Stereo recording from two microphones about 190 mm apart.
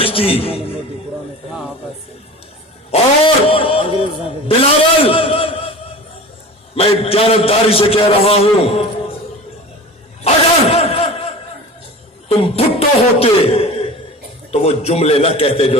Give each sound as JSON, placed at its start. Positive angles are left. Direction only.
{"t": 0.0, "sound": "a man's voice", "side_deg": 30}
{"t": 2.9, "sound": "a man's voice", "side_deg": 30}
{"t": 6.7, "sound": "a man's voice", "side_deg": 30}
{"t": 10.2, "sound": "a sound", "side_deg": 35}
{"t": 12.5, "sound": "a man's voice", "side_deg": 30}